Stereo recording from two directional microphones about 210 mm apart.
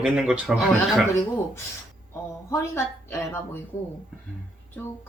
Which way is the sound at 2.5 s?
10° left (ahead or behind).